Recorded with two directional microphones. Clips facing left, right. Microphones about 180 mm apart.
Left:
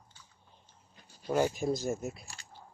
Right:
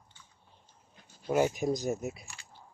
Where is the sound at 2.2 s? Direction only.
35° left (ahead or behind).